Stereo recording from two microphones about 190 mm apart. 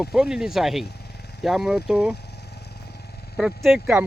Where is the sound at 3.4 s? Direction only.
Centre (ahead or behind).